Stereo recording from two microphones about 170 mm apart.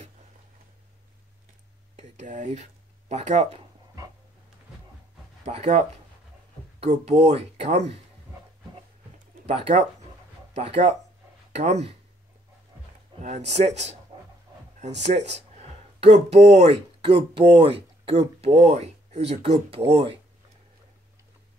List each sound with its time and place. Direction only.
2.0 s speech: 45° right (ahead or behind)
5.4 s speech: 40° right (ahead or behind)
9.5 s speech: 40° right (ahead or behind)
13.2 s speech: 45° right (ahead or behind)
15.0 s speech: 40° right (ahead or behind)